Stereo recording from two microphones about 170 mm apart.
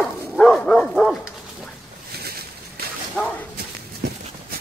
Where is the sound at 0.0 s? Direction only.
Centre (ahead or behind).